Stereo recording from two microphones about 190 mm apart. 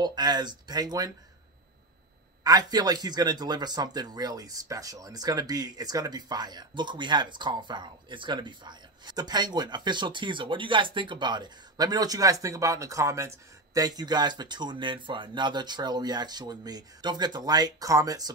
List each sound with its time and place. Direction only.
0.0 s speech: 20° right (ahead or behind)
2.4 s speech: 20° right (ahead or behind)